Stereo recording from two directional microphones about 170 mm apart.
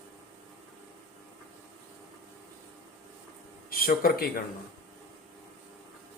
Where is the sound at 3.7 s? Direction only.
60° left (ahead or behind).